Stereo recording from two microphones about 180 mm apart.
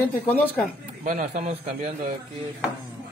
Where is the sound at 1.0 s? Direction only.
45° right (ahead or behind).